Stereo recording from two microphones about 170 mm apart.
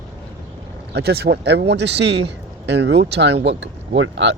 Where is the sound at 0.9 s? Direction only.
70° right (ahead or behind).